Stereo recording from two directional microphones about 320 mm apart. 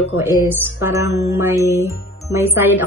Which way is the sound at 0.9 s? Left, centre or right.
Centre.